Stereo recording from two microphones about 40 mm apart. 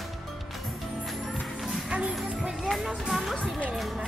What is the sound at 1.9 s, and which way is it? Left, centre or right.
Music, right.